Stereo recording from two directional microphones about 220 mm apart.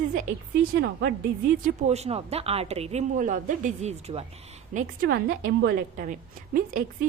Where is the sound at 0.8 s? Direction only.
50° right (ahead or behind).